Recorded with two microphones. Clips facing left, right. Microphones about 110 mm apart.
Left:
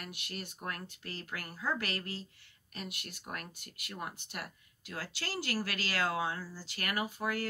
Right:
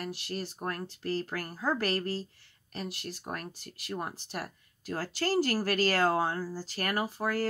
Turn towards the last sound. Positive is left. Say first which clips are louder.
# right 4 dB
turn(degrees=-40)  # may be behind; listen again after turning